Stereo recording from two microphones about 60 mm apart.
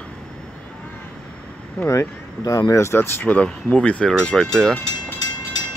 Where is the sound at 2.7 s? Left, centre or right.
Left.